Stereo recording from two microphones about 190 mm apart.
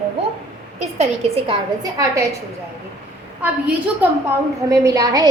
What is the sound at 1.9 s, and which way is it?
Speech, 15° right (ahead or behind).